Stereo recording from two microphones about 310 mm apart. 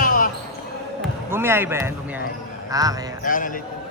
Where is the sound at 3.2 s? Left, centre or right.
Left.